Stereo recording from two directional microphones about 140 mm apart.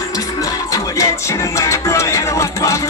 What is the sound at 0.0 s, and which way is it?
Music, 25° left (ahead or behind).